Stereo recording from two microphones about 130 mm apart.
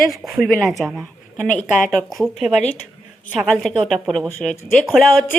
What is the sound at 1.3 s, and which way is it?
Speech, 85° left.